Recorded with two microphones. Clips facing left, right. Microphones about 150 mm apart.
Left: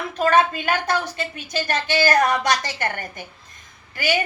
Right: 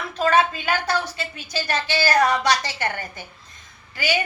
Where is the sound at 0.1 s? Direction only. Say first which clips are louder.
Left 1 dB; 50° left (ahead or behind).